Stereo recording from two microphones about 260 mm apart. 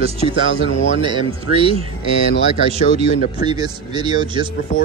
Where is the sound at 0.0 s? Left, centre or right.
Right.